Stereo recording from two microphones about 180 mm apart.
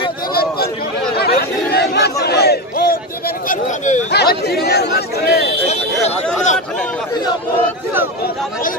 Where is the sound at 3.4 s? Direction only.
45° left (ahead or behind).